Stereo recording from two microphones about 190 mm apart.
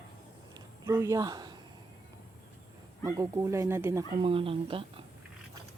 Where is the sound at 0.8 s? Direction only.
15° right (ahead or behind).